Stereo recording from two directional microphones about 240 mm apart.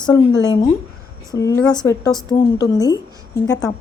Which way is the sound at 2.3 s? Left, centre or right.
Centre.